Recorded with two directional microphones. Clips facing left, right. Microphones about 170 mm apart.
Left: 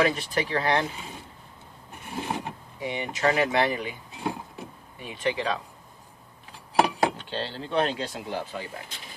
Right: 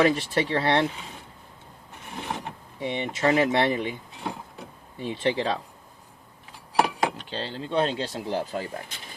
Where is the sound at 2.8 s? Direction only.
25° right (ahead or behind).